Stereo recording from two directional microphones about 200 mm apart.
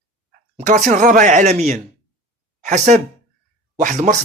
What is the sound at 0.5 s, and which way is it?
A woman's voice, 40° right (ahead or behind).